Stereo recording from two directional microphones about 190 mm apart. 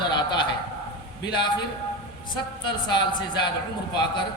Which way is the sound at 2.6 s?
25° left (ahead or behind).